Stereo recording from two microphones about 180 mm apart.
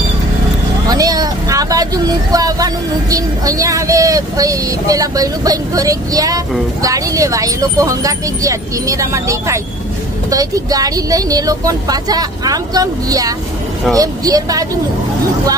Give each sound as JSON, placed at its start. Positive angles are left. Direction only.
{"t": 0.8, "sound": "speech", "side_deg": -20}